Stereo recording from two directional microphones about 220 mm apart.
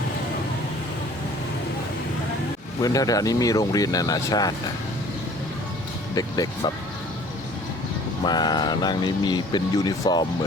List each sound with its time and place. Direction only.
2.8 s speech: 15° left (ahead or behind)
6.1 s speech: 15° left (ahead or behind)
8.2 s speech: 20° left (ahead or behind)